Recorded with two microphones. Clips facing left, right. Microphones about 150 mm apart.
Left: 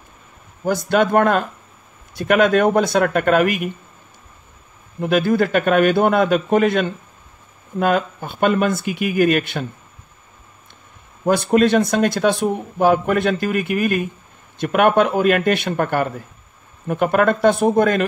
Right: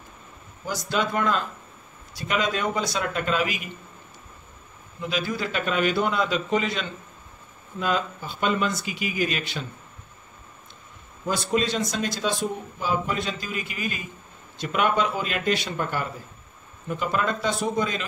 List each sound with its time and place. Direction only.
0.7 s speech: 55° left (ahead or behind)
5.0 s speech: 55° left (ahead or behind)
11.2 s speech: 60° left (ahead or behind)